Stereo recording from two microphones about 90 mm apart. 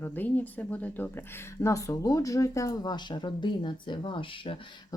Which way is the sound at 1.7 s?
40° left (ahead or behind).